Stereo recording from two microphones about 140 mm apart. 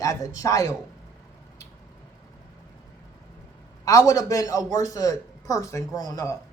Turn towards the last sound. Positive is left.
turn(degrees=25)  # may be behind; listen again after turning